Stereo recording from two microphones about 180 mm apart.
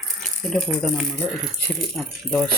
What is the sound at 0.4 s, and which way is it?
Speech, centre (ahead or behind).